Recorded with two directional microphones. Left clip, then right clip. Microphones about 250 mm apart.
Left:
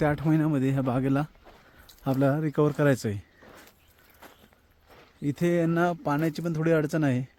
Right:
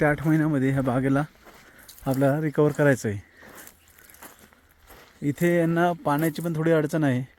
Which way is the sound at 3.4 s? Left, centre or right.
Right.